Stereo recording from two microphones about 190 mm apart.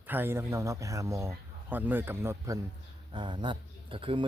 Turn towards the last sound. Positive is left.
turn(degrees=-30)  # may be behind; listen again after turning